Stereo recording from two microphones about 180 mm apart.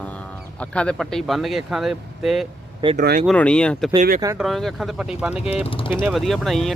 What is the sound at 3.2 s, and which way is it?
Speech, 5° left (ahead or behind).